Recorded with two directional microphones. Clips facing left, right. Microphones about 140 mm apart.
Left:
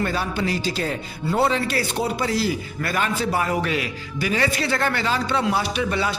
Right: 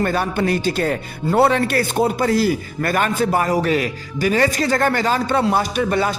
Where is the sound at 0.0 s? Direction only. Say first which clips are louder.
Right 5 dB; 55° right (ahead or behind).